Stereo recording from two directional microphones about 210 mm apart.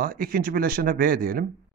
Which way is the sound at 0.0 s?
45° right (ahead or behind).